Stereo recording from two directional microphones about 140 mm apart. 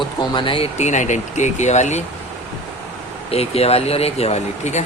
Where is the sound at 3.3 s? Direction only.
45° left (ahead or behind).